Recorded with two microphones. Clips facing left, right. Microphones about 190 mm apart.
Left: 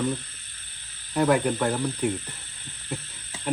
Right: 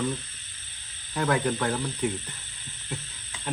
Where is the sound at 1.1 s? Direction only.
10° left (ahead or behind).